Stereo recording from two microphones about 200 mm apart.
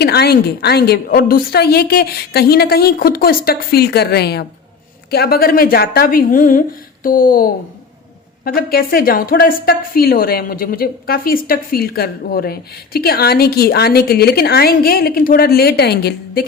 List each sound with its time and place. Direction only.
0.0 s a woman's voice: 55° left (ahead or behind)